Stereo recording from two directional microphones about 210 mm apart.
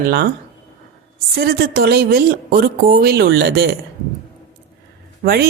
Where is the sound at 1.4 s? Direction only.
45° right (ahead or behind).